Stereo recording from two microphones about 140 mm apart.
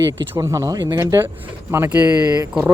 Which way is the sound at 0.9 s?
15° right (ahead or behind).